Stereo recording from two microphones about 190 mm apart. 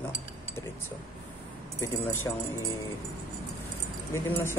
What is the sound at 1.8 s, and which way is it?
Speech, 15° left (ahead or behind).